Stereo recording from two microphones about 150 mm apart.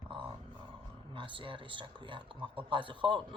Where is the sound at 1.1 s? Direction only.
35° right (ahead or behind).